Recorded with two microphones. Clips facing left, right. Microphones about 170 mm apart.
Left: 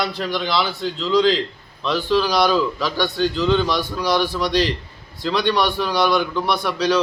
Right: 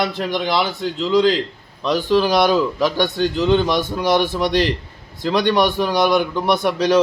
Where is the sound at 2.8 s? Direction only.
50° right (ahead or behind).